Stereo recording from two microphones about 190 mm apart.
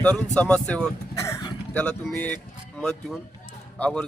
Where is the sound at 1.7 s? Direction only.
5° left (ahead or behind).